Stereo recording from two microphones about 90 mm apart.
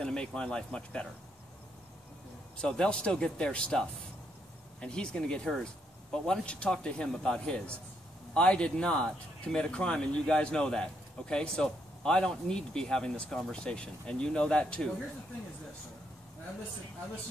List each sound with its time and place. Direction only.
0.0 s speech: 10° left (ahead or behind)
2.5 s speech: 10° left (ahead or behind)